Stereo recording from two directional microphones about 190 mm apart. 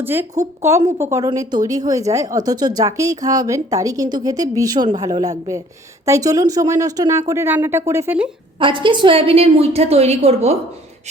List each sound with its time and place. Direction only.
0.0 s speech: 10° right (ahead or behind)
8.5 s a woman's voice: 25° right (ahead or behind)